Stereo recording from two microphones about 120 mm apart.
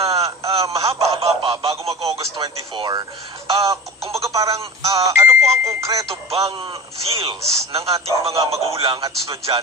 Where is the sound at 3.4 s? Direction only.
55° right (ahead or behind).